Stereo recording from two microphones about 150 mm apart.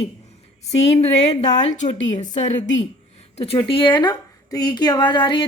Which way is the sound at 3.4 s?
35° left (ahead or behind).